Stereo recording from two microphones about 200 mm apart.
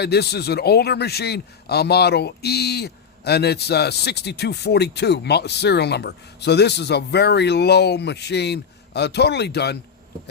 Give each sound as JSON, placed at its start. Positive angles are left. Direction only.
{"t": 0.0, "sound": "a man's voice", "side_deg": 55}